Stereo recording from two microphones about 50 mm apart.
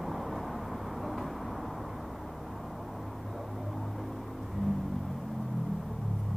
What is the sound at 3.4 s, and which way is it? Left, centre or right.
Vehicle, centre.